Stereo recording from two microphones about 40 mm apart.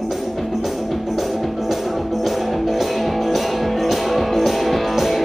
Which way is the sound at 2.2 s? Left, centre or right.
Centre.